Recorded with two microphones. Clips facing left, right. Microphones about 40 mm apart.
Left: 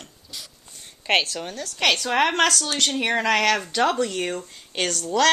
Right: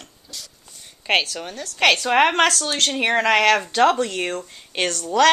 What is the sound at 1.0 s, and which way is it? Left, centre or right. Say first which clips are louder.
Speech: right 1 dB; centre.